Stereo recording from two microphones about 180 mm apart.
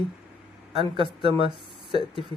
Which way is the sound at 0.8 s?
30° right (ahead or behind).